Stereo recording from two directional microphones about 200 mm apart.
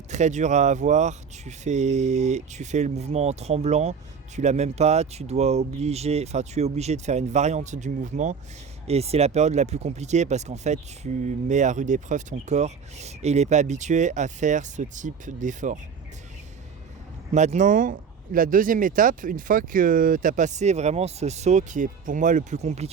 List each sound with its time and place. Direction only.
0.1 s speech: 35° right (ahead or behind)
17.3 s speech: 35° right (ahead or behind)